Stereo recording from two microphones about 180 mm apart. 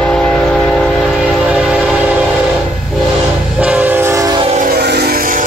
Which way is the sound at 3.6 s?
5° right (ahead or behind).